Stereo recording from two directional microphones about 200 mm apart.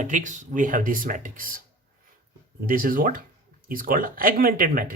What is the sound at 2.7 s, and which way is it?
Speech, 45° right (ahead or behind).